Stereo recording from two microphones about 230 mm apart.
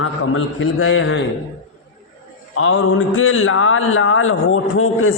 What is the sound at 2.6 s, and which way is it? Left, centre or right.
A man's voice, left.